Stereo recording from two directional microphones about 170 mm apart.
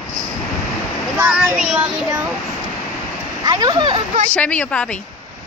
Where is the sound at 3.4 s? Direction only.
25° right (ahead or behind).